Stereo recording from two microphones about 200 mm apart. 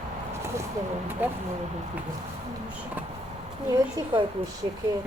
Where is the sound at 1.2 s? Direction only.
10° right (ahead or behind).